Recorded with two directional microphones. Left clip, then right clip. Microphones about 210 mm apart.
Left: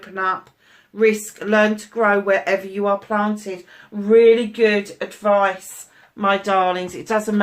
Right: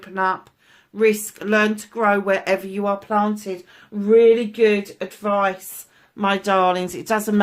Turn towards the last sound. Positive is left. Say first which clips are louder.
# left 1 dB
turn(degrees=-45)  # may be behind; listen again after turning